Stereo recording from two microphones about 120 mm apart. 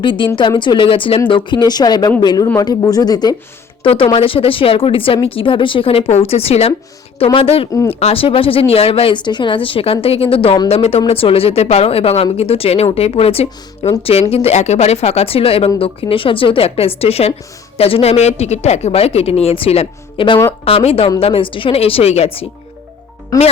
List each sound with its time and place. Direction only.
0.0 s speech: 45° left (ahead or behind)
3.8 s speech: 50° left (ahead or behind)